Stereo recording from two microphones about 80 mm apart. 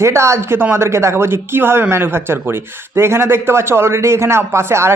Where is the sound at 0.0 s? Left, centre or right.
Right.